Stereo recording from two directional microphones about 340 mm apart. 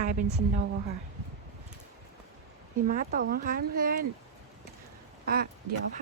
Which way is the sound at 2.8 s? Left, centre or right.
Right.